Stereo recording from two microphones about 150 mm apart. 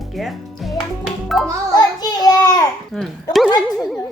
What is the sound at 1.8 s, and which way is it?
Child singing, 25° left (ahead or behind).